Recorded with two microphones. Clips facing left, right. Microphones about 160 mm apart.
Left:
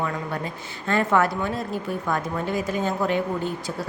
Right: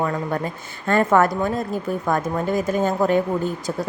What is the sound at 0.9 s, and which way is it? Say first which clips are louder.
Speech: right 4 dB; 45° right (ahead or behind).